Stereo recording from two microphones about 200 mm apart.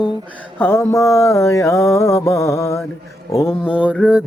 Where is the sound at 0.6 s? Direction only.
10° left (ahead or behind).